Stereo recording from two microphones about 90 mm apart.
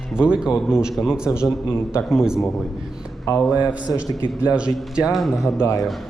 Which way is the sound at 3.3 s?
45° left (ahead or behind).